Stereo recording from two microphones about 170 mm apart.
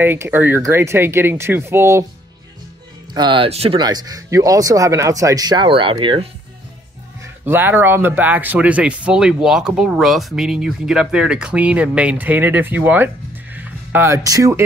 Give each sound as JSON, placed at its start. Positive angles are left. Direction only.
{"t": 0.0, "sound": "speech", "side_deg": -10}
{"t": 3.2, "sound": "speech", "side_deg": -30}
{"t": 3.8, "sound": "speech", "side_deg": -20}
{"t": 7.4, "sound": "speech", "side_deg": -15}